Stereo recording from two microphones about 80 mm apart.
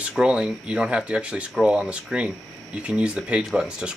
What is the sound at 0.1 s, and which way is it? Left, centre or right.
Speech, centre.